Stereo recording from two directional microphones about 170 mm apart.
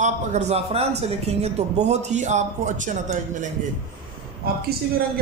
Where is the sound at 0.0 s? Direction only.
40° right (ahead or behind).